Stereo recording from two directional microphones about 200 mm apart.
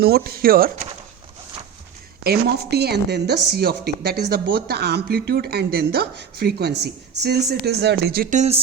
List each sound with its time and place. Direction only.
0.0 s a woman's voice: 50° right (ahead or behind)
2.2 s a woman's voice: 55° right (ahead or behind); by 8.6 s 35° right (ahead or behind)